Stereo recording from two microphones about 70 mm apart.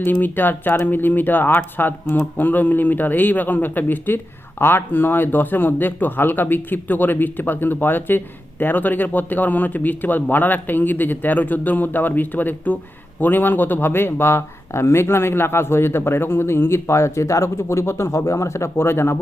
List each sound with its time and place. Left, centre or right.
0.0 s speech: left